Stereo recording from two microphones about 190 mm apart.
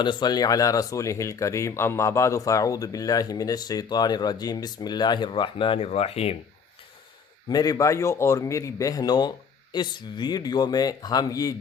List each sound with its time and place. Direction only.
0.0 s speech: 25° left (ahead or behind)
7.4 s speech: 20° left (ahead or behind)